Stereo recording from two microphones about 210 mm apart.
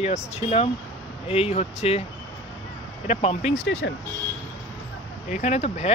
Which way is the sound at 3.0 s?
30° left (ahead or behind).